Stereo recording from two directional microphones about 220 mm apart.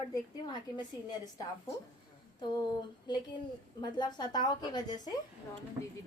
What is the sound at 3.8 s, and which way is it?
A woman's voice, 20° left (ahead or behind).